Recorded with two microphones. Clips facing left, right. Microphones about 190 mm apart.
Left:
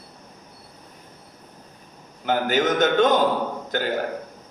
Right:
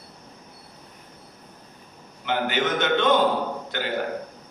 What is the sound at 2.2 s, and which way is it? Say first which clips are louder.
A man's voice: left 3 dB; 40° left (ahead or behind).